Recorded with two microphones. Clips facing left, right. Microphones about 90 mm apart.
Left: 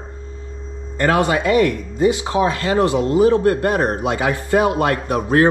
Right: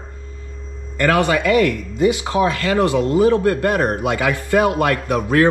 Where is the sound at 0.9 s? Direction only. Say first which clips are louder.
Even; 25° left (ahead or behind).